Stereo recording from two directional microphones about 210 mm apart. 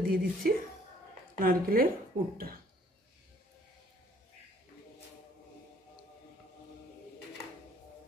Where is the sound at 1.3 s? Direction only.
45° right (ahead or behind).